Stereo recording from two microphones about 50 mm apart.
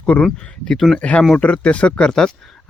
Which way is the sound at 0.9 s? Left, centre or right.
Left.